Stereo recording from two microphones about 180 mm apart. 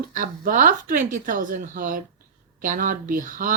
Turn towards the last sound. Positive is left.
turn(degrees=-45)  # may be behind; listen again after turning